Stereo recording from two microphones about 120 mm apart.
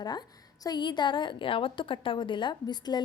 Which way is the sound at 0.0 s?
35° left (ahead or behind).